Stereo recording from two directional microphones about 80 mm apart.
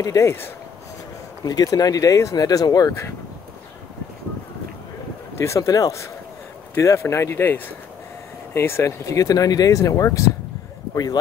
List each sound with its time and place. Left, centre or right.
0.0 s speech: left
1.4 s speech: left
5.4 s speech: left